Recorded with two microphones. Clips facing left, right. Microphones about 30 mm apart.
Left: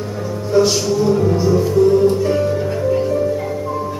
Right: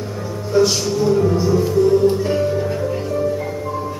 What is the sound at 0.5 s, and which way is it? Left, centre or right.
Speech, centre.